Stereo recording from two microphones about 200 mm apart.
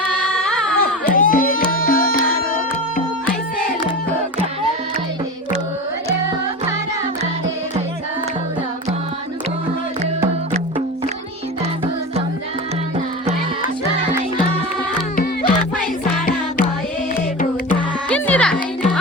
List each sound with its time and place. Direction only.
0.3 s a sound: 5° left (ahead or behind)
0.8 s music: 45° left (ahead or behind)
15.1 s music: 50° left (ahead or behind)
17.7 s music: 5° left (ahead or behind)